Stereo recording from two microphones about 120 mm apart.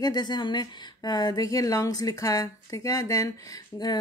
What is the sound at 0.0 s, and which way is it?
Speech, 35° left (ahead or behind).